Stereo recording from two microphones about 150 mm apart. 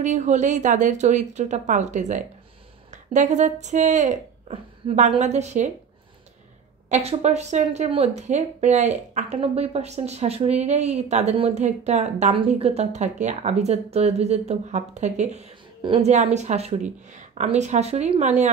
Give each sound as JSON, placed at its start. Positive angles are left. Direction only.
{"t": 0.0, "sound": "speech", "side_deg": -55}
{"t": 5.2, "sound": "speech", "side_deg": -50}
{"t": 6.9, "sound": "speech", "side_deg": -45}